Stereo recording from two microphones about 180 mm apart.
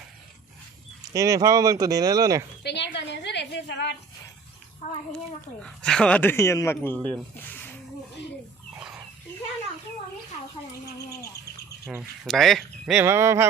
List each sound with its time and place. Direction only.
1.1 s speech: 20° right (ahead or behind)
2.6 s a woman's voice: 75° left (ahead or behind)
4.8 s a child's voice: 35° left (ahead or behind)
5.1 s speech: 5° left (ahead or behind)
12.2 s speech: centre (ahead or behind); by 13.5 s 15° right (ahead or behind)